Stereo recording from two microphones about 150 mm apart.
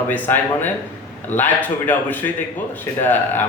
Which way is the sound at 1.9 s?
10° left (ahead or behind).